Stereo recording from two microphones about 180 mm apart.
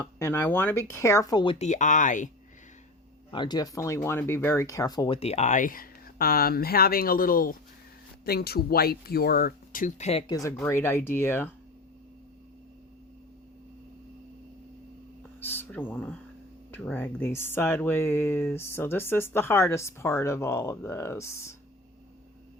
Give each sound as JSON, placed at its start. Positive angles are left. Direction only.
{"t": 0.0, "sound": "speech", "side_deg": 15}
{"t": 1.5, "sound": "speech", "side_deg": 40}
{"t": 3.3, "sound": "speech", "side_deg": 25}
{"t": 10.2, "sound": "speech", "side_deg": 20}
{"t": 15.4, "sound": "a sound", "side_deg": 10}
{"t": 16.7, "sound": "speech", "side_deg": 10}